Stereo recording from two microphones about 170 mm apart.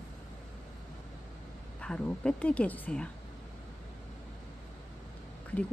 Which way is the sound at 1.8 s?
5° left (ahead or behind).